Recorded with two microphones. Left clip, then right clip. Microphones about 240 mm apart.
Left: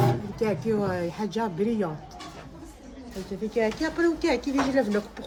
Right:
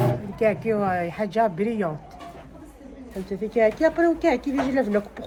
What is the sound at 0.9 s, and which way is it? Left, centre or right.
Speech, right.